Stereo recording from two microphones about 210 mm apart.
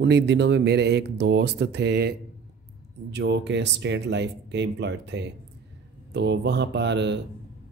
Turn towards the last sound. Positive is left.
turn(degrees=-55)  # may be behind; listen again after turning